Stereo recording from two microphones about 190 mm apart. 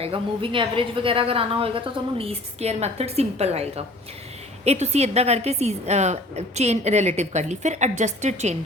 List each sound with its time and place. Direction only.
0.0 s a woman's voice: 25° right (ahead or behind)